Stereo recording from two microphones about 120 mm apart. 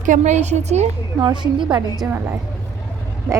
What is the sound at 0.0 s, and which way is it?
Speech, 85° right.